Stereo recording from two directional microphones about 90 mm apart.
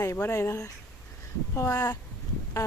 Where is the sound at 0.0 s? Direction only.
30° left (ahead or behind).